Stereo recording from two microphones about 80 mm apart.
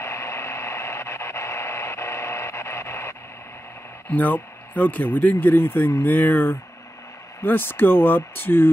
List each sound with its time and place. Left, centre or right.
0.0 s radio: left
4.1 s speech: left